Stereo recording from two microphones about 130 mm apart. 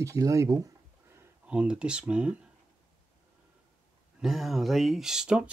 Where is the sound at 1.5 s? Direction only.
10° right (ahead or behind).